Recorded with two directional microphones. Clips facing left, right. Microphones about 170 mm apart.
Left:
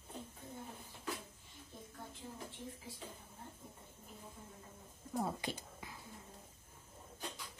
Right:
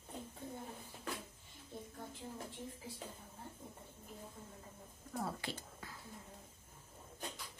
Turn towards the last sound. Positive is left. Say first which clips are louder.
# left 2 dB
turn(degrees=15)  # may be behind; listen again after turning